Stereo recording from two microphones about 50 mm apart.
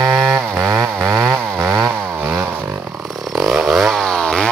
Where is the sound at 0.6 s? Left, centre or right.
Right.